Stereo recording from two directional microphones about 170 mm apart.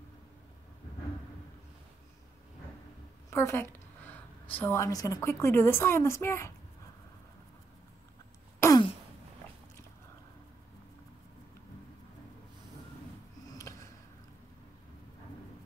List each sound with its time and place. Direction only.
3.3 s a woman's voice: 15° left (ahead or behind)
8.5 s wail: 15° left (ahead or behind)
13.5 s a sound: 20° left (ahead or behind)